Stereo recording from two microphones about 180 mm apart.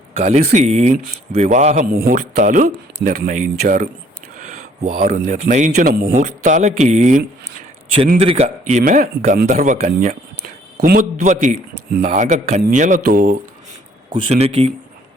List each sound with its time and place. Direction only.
0.2 s a man's voice: 40° right (ahead or behind)
4.4 s a man's voice: 40° right (ahead or behind)
8.8 s a man's voice: 50° right (ahead or behind)
10.8 s a man's voice: 55° right (ahead or behind)
14.2 s speech: 35° right (ahead or behind)